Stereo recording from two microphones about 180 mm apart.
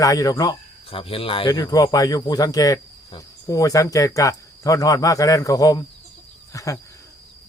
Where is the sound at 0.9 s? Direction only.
30° left (ahead or behind).